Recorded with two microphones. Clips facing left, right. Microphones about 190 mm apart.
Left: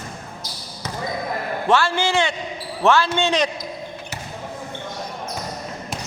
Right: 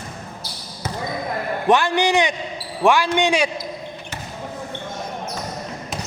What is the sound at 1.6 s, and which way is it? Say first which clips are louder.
A man's voice: right 2 dB; 15° right (ahead or behind).